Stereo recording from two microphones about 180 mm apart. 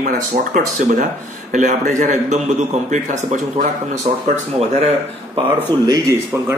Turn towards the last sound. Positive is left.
turn(degrees=-15)  # may be behind; listen again after turning